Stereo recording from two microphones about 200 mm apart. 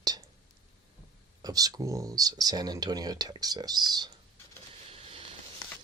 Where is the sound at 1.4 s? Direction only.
20° right (ahead or behind).